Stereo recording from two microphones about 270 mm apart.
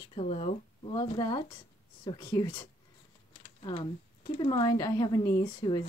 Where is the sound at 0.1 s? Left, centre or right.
Left.